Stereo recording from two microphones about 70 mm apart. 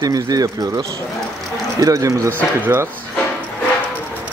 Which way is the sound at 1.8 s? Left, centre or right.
Right.